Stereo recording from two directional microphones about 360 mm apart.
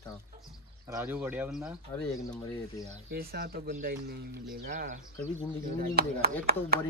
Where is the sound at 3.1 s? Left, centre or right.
Right.